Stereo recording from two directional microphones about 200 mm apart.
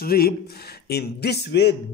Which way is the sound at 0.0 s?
50° left (ahead or behind).